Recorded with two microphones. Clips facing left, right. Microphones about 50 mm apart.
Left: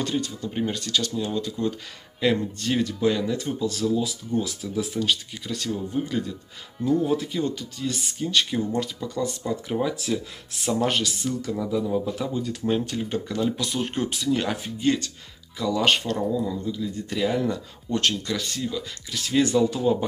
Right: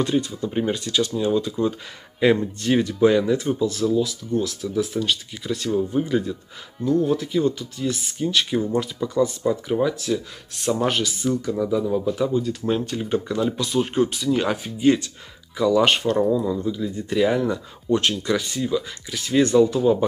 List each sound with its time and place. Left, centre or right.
0.0 s speech: centre
6.8 s speech: centre
14.8 s speech: centre